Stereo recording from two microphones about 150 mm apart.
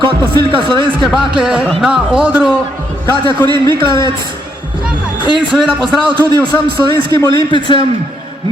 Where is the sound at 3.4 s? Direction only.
30° right (ahead or behind).